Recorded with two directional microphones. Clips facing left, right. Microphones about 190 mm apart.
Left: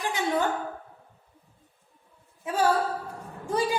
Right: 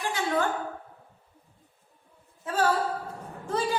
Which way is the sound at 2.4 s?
15° left (ahead or behind).